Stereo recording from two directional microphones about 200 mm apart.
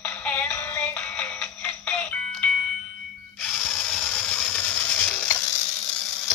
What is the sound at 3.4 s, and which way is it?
Ratchet, 5° left (ahead or behind).